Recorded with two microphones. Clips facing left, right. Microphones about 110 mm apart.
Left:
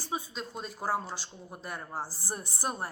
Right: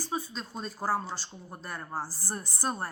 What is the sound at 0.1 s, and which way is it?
Speech, 15° left (ahead or behind).